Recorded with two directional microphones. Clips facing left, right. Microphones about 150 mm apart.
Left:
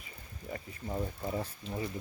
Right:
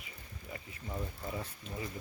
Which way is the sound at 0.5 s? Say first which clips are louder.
Left 5 dB; 40° left (ahead or behind).